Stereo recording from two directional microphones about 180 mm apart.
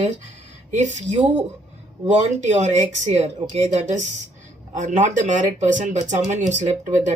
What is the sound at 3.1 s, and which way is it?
Speech, 40° right (ahead or behind).